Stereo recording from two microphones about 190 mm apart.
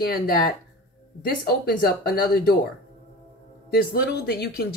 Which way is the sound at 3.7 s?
55° left (ahead or behind).